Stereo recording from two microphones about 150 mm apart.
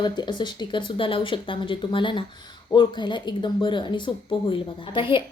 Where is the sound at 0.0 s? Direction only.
30° left (ahead or behind).